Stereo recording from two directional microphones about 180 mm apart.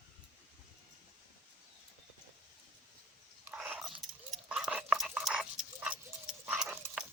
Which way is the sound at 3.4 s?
10° right (ahead or behind).